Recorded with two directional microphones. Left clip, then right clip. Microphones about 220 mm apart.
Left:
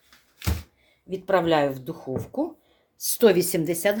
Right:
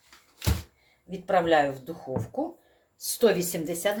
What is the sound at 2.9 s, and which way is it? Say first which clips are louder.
Speech: left 4 dB; 55° left (ahead or behind).